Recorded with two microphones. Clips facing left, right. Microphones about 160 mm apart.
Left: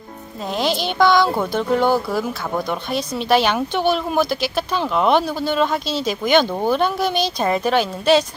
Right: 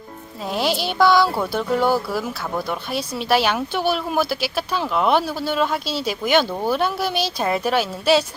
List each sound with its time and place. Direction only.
0.5 s speech: 10° right (ahead or behind)